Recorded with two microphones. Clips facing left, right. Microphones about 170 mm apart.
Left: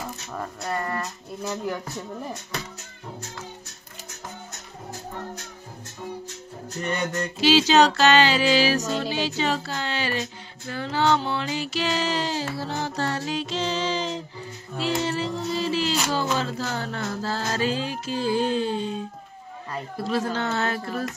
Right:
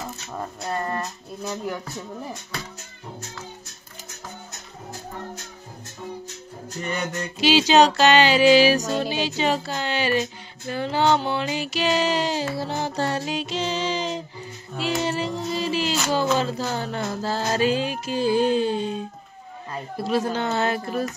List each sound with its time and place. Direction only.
0.3 s music: 15° right (ahead or behind)
6.9 s music: 10° right (ahead or behind)